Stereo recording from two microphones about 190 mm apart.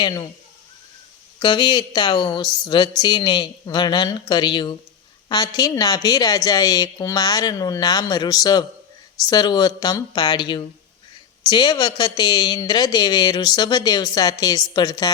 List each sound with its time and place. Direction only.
0.0 s speech: 20° left (ahead or behind)
1.4 s speech: 25° left (ahead or behind)